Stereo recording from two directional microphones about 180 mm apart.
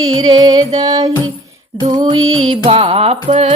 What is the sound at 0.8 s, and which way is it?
Female singing, 20° right (ahead or behind).